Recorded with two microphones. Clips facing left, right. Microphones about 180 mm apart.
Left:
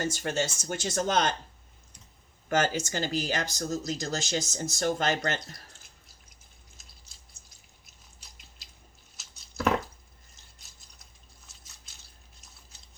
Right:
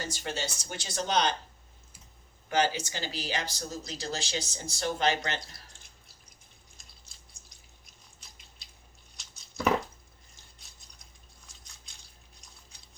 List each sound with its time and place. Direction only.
0.0 s speech: 50° left (ahead or behind)
2.5 s speech: 45° left (ahead or behind)
9.1 s a sound: centre (ahead or behind)
11.4 s drip: 5° left (ahead or behind)